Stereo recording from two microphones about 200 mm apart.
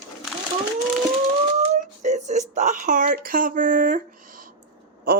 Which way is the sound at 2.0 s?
35° right (ahead or behind).